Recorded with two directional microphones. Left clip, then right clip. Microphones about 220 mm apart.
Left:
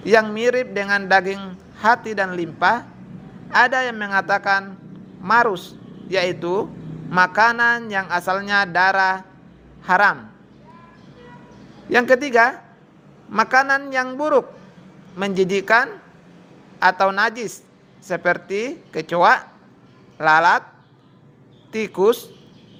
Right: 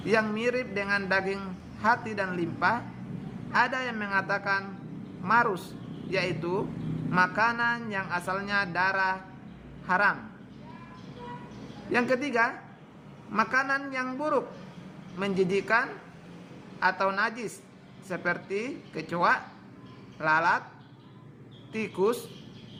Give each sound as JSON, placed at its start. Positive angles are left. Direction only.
{"t": 0.0, "sound": "a man's voice", "side_deg": 30}
{"t": 11.9, "sound": "a man's voice", "side_deg": 35}
{"t": 21.7, "sound": "a man's voice", "side_deg": 35}